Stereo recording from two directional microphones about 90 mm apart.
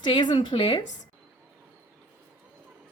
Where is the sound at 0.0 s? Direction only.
60° left (ahead or behind).